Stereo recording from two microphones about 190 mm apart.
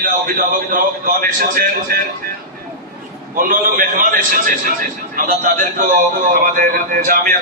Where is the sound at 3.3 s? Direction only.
45° right (ahead or behind).